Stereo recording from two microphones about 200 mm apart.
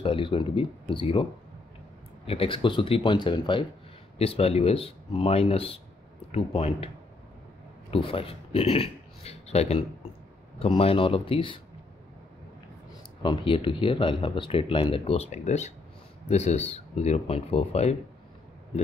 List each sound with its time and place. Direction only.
0.0 s speech: 25° left (ahead or behind)
2.2 s speech: 25° left (ahead or behind)
7.9 s a man's voice: 30° left (ahead or behind)
13.2 s speech: 25° left (ahead or behind)